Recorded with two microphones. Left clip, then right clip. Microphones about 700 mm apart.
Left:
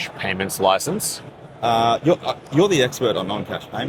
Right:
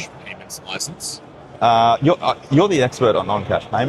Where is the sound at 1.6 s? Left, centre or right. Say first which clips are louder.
Right 4 dB; right.